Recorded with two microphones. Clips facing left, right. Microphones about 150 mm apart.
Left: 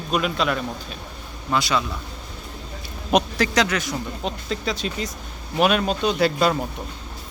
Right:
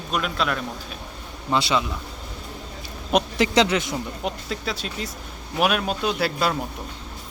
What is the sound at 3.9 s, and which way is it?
Speech, 5° right (ahead or behind).